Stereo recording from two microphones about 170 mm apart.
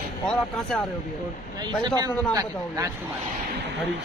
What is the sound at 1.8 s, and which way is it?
A man's voice, 25° right (ahead or behind).